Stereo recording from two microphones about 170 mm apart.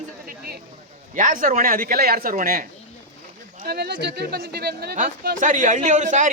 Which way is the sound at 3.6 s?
70° right (ahead or behind).